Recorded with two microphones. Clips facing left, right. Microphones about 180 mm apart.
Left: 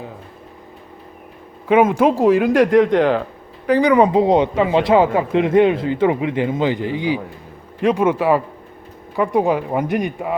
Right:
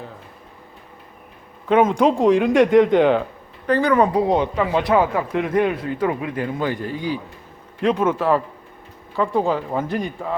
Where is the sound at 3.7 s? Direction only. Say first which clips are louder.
Left 3 dB; 15° left (ahead or behind).